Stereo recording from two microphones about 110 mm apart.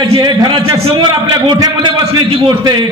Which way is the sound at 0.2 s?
40° right (ahead or behind).